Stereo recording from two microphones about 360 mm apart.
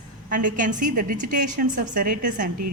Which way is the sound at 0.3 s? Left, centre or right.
Right.